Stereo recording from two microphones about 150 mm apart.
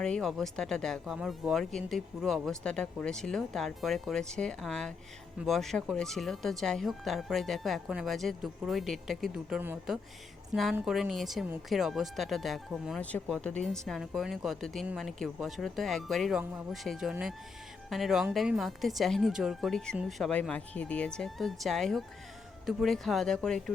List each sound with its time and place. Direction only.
0.0 s speech: 5° left (ahead or behind)